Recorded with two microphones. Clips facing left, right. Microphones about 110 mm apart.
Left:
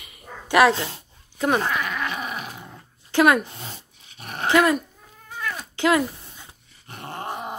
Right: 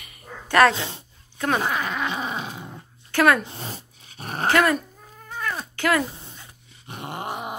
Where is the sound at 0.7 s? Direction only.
20° right (ahead or behind).